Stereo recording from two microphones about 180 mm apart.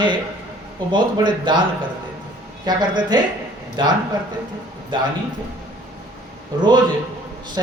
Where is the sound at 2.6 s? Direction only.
25° right (ahead or behind).